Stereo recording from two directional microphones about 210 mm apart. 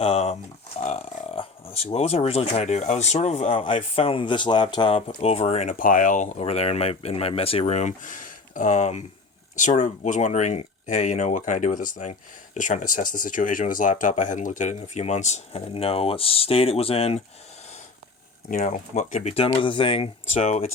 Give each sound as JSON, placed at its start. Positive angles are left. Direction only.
{"t": 0.0, "sound": "speech", "side_deg": 30}
{"t": 18.5, "sound": "speech", "side_deg": 35}